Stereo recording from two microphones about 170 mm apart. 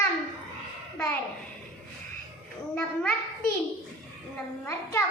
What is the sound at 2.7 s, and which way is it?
Speech, 10° left (ahead or behind).